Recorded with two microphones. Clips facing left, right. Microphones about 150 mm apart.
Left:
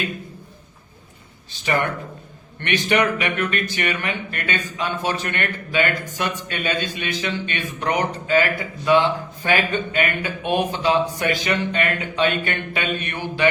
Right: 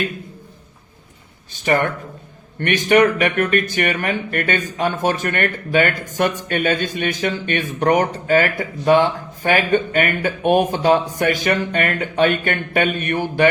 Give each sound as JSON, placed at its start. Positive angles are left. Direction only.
{"t": 1.5, "sound": "speech", "side_deg": -45}